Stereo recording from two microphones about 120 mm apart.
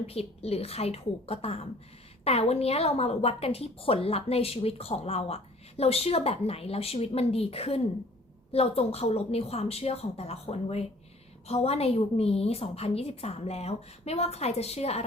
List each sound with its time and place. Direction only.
0.0 s a woman's voice: 55° left (ahead or behind)